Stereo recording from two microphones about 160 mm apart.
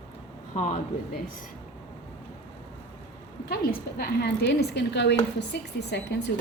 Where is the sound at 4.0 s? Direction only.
90° left.